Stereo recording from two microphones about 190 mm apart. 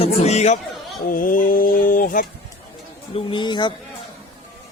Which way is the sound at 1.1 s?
45° left (ahead or behind).